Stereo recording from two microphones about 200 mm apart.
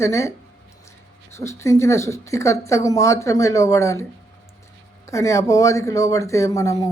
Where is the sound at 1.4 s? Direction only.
15° left (ahead or behind).